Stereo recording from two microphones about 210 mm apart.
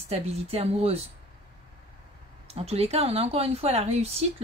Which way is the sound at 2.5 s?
30° right (ahead or behind).